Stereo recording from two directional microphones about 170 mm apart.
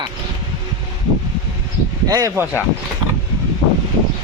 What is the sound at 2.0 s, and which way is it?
Speech, 20° right (ahead or behind).